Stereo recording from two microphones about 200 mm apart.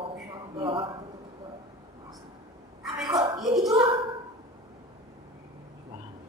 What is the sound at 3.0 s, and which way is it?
Speech, 20° right (ahead or behind).